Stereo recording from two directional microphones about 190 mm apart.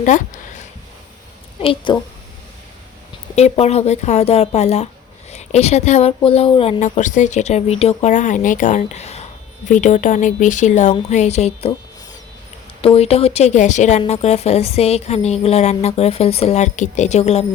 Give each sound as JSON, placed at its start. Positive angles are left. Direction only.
{"t": 1.6, "sound": "a woman's voice", "side_deg": 25}
{"t": 3.3, "sound": "speech", "side_deg": 35}
{"t": 12.8, "sound": "speech", "side_deg": 30}